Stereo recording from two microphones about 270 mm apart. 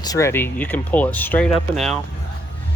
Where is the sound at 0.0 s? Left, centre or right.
Centre.